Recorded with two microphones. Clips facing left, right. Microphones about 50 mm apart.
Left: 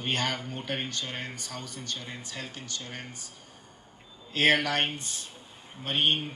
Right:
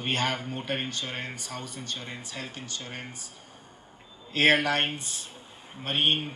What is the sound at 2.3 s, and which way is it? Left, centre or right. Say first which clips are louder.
Speech: right 1 dB; centre.